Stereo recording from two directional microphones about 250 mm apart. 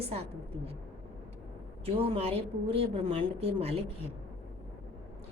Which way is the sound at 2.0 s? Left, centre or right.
Right.